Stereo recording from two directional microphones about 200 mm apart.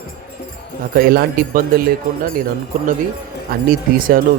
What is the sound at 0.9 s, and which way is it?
Speech, 50° right (ahead or behind).